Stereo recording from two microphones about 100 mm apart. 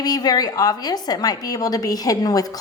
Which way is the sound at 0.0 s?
40° left (ahead or behind).